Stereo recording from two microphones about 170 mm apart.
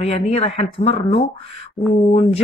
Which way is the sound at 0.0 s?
35° left (ahead or behind).